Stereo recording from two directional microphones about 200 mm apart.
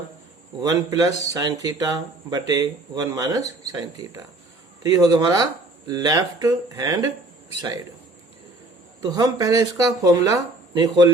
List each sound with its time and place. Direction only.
0.6 s speech: 20° right (ahead or behind)
9.0 s speech: 20° right (ahead or behind)